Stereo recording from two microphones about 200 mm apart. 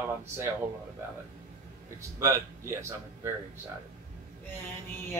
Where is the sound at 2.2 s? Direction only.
15° right (ahead or behind).